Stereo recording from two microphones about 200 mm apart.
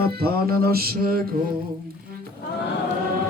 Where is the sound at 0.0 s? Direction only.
50° right (ahead or behind).